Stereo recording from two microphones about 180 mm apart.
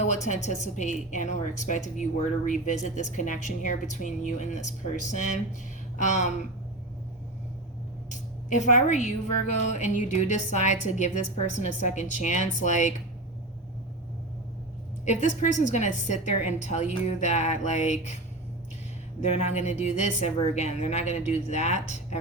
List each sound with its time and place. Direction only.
0.0 s a woman's voice: 40° left (ahead or behind)
8.1 s a woman's voice: 45° left (ahead or behind)
15.0 s a woman's voice: 40° left (ahead or behind)
19.4 s a woman's voice: 40° left (ahead or behind)